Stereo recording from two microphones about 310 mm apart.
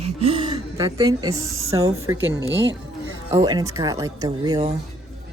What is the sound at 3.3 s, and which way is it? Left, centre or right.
A woman's voice, centre.